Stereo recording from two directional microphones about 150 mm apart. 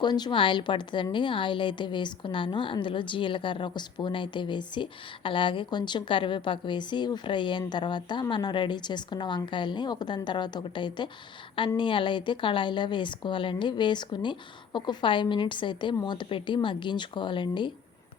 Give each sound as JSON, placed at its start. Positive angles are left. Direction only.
{"t": 0.0, "sound": "a woman's voice", "side_deg": 30}